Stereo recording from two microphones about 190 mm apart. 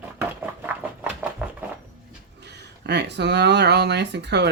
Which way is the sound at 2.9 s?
65° right (ahead or behind).